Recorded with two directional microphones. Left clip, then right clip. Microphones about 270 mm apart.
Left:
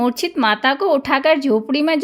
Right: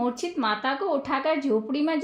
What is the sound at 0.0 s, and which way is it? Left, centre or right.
A woman's voice, left.